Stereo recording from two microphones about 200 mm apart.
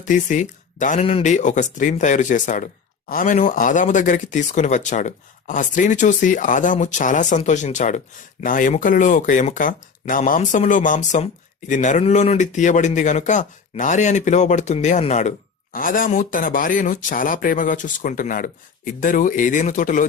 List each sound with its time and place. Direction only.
0.0 s speech: 40° left (ahead or behind)